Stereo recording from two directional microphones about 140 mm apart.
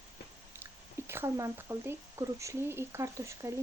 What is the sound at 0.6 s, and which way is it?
Speech, 15° right (ahead or behind).